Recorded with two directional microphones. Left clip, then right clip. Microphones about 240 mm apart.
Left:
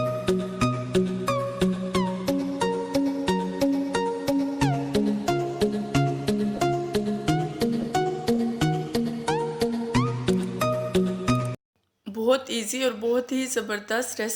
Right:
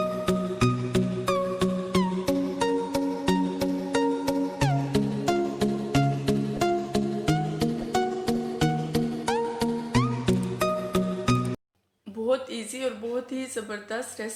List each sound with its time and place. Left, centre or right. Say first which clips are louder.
0.3 s music: left 1 dB; centre
13.3 s speech: left 5 dB; left